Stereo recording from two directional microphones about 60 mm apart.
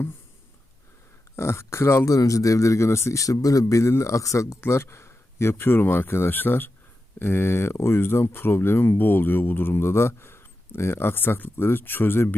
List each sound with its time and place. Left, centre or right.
1.4 s speech: left
2.0 s a man's voice: left
4.6 s speech: left